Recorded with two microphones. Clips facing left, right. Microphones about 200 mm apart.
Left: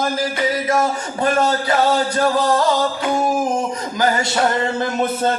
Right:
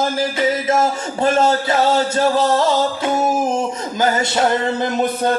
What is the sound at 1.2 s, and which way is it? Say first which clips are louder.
Speech: right 2 dB; 25° right (ahead or behind).